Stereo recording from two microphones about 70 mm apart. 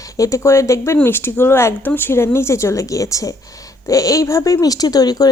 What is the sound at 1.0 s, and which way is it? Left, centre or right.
Speech, left.